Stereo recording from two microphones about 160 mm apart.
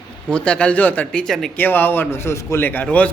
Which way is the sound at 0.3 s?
5° left (ahead or behind).